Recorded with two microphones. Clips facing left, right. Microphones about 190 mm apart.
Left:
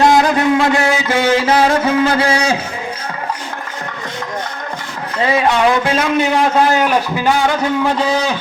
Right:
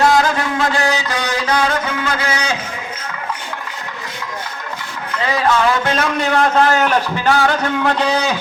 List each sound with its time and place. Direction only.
0.0 s music: 20° left (ahead or behind)
5.1 s a man's voice: 25° left (ahead or behind); by 8.3 s 5° left (ahead or behind)